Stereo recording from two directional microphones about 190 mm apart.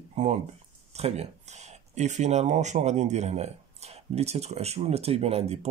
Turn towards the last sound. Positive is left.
turn(degrees=-35)  # may be behind; listen again after turning